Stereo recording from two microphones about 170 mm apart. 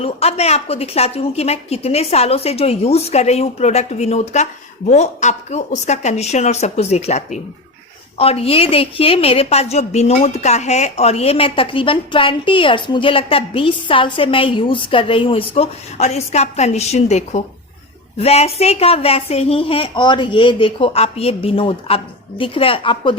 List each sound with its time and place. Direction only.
0.0 s a woman's voice: 35° left (ahead or behind)